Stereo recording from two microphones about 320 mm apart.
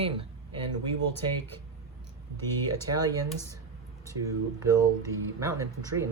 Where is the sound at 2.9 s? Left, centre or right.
Centre.